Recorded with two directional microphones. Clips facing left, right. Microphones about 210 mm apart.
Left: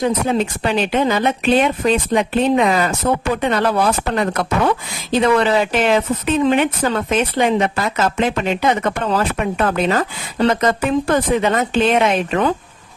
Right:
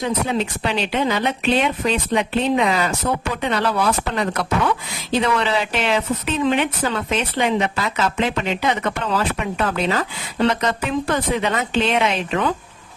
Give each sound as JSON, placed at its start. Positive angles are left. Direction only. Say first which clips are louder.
{"t": 0.0, "sound": "speech", "louder": "left 4 dB", "side_deg": 45}